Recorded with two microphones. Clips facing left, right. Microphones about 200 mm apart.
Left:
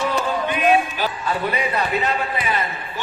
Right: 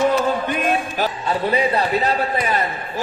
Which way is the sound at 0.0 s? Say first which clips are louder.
Right 4 dB; 50° right (ahead or behind).